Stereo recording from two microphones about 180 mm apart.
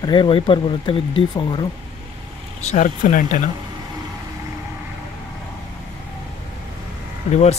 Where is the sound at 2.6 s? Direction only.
40° left (ahead or behind).